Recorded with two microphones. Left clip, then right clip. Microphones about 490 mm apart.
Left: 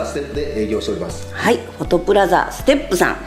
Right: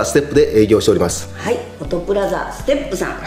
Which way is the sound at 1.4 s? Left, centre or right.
Left.